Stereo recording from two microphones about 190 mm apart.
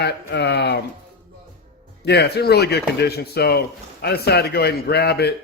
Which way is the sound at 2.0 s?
60° left (ahead or behind).